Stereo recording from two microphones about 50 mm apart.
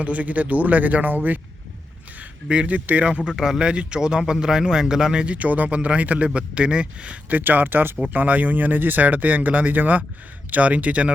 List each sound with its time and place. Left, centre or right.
0.0 s speech: right
2.5 s speech: right
3.2 s a man's voice: centre; by 11.1 s right